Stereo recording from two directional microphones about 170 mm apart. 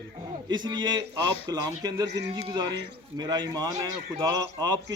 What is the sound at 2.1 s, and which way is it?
Speech, 90° right.